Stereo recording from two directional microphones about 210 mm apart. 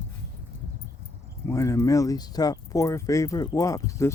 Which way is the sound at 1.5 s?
15° left (ahead or behind).